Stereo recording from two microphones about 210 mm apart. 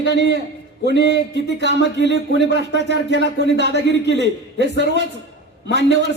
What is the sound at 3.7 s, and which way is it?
Speech, 55° left (ahead or behind).